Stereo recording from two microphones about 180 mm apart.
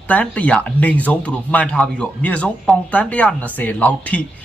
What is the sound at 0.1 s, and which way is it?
Speech, 10° left (ahead or behind).